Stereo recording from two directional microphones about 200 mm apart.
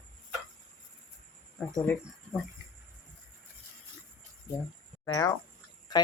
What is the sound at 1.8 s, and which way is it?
Speech, 5° left (ahead or behind).